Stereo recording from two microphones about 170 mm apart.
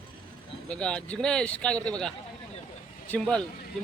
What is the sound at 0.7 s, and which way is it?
Speech, 5° left (ahead or behind).